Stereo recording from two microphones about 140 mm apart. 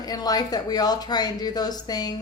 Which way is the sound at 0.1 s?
30° left (ahead or behind).